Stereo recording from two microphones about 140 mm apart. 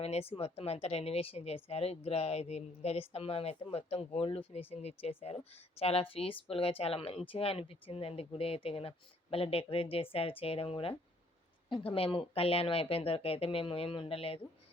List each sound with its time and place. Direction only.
0.0 s a woman's voice: 45° left (ahead or behind)